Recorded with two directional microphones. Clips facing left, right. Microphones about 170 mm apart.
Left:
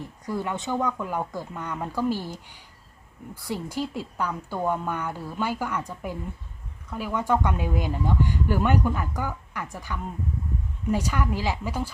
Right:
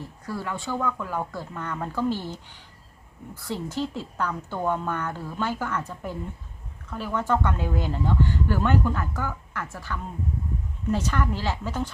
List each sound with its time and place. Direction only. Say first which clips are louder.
0.3 s speech: left 2 dB; 20° left (ahead or behind)